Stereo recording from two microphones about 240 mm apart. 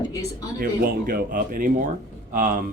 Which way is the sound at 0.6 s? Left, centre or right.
Right.